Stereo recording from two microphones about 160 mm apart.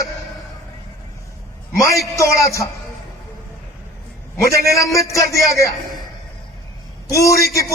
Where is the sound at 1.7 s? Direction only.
20° left (ahead or behind).